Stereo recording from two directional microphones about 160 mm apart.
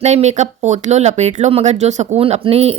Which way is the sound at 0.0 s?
45° right (ahead or behind).